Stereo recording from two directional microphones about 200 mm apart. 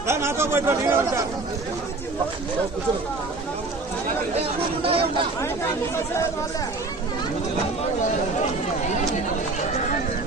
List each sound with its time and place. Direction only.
0.1 s speech: 15° right (ahead or behind)
4.4 s speech: 30° right (ahead or behind)